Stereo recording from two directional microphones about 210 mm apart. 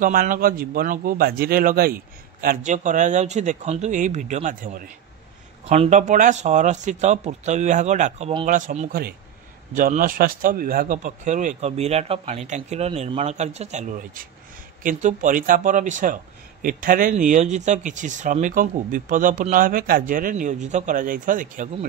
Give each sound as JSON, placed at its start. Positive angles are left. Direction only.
{"t": 0.0, "sound": "a man's voice", "side_deg": -40}
{"t": 8.5, "sound": "speech", "side_deg": -40}